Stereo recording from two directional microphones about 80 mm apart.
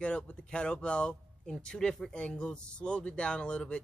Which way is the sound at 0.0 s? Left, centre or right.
Centre.